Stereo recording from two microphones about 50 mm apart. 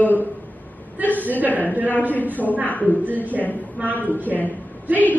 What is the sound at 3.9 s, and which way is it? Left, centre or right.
A woman's voice, right.